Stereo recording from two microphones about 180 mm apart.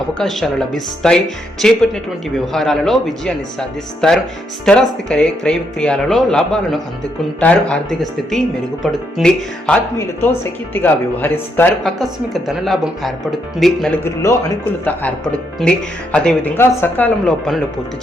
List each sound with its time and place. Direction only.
0.1 s speech: 5° left (ahead or behind)
10.8 s speech: 10° left (ahead or behind)
11.9 s speech: centre (ahead or behind)
14.0 s speech: 15° left (ahead or behind)